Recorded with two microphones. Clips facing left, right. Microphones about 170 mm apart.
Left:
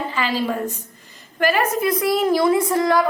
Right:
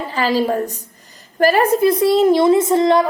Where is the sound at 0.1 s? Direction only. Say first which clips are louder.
Right 9 dB; 40° right (ahead or behind).